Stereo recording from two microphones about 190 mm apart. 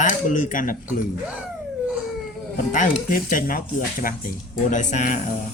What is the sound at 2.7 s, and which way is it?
Speech, 45° left (ahead or behind).